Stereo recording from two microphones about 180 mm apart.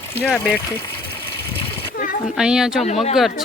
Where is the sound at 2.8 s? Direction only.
35° left (ahead or behind).